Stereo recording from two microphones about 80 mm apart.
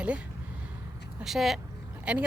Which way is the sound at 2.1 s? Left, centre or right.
Centre.